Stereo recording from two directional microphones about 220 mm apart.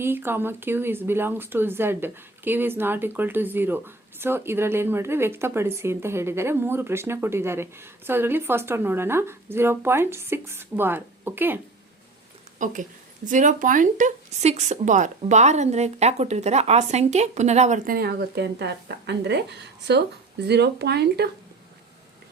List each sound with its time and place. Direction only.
0.0 s speech: 10° right (ahead or behind)
12.5 s speech: 35° right (ahead or behind)